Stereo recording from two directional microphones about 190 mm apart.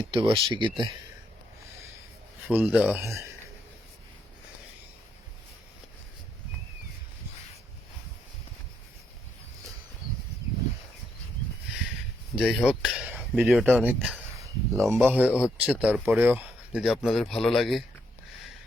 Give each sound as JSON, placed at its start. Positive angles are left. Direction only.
{"t": 0.1, "sound": "speech", "side_deg": -25}
{"t": 2.5, "sound": "speech", "side_deg": -10}
{"t": 12.4, "sound": "speech", "side_deg": 0}